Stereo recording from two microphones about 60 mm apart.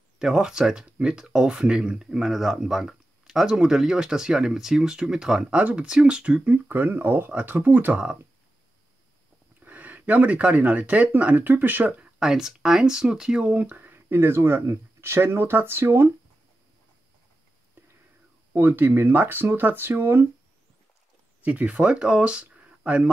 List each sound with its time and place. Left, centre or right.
0.2 s speech: centre
5.5 s speech: right
9.6 s speech: right
12.2 s speech: centre
13.5 s speech: right
18.5 s speech: right
21.4 s speech: right